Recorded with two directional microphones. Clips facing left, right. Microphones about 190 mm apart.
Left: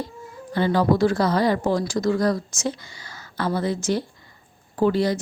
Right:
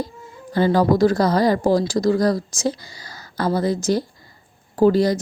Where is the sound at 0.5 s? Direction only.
40° right (ahead or behind).